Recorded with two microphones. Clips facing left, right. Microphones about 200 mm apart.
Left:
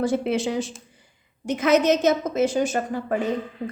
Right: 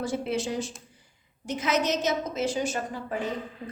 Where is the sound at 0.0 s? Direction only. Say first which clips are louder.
Left 6 dB; 60° left (ahead or behind).